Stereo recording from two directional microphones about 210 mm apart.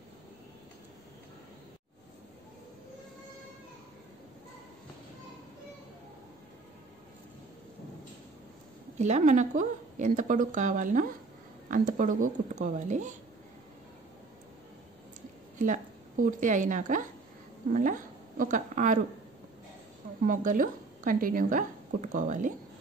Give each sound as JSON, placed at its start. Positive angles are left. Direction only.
{"t": 8.9, "sound": "speech", "side_deg": -35}
{"t": 15.6, "sound": "a woman's voice", "side_deg": -40}
{"t": 20.2, "sound": "speech", "side_deg": -40}